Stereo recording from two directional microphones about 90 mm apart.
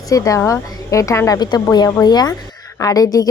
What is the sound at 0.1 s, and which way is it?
Speech, 40° left (ahead or behind).